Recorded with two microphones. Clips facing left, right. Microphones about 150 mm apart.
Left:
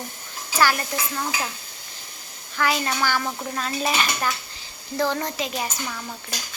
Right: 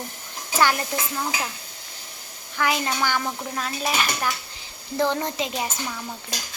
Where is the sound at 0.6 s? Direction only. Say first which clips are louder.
Even; 20° right (ahead or behind).